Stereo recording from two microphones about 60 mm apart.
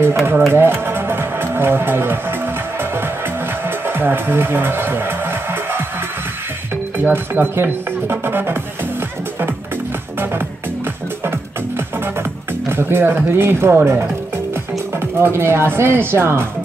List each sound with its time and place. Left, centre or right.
0.1 s speech: right
0.5 s music: right
3.8 s speech: right
7.0 s speech: right
12.6 s speech: right
15.1 s speech: right